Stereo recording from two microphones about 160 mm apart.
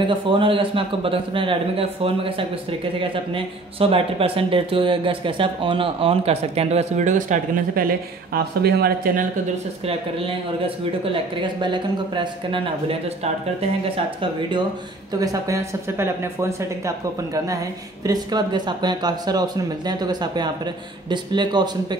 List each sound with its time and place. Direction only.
0.1 s a man's voice: 35° right (ahead or behind); by 7.8 s 55° right (ahead or behind)
8.3 s speech: 80° right
11.6 s a man's voice: 30° right (ahead or behind)
15.1 s speech: 20° right (ahead or behind)